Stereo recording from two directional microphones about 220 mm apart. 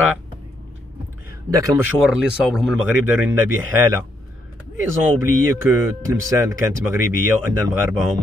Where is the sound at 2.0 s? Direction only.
5° right (ahead or behind).